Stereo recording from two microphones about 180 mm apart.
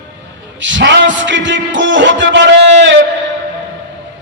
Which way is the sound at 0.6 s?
80° right.